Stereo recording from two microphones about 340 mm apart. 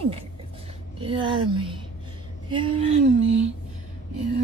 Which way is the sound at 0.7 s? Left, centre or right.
Centre.